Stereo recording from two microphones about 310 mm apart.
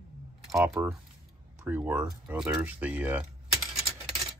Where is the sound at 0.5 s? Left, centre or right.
Centre.